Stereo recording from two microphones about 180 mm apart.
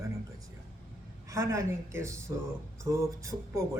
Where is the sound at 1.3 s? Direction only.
15° right (ahead or behind).